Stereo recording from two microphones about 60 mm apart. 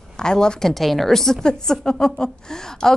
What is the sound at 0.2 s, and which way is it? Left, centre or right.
A woman's voice, centre.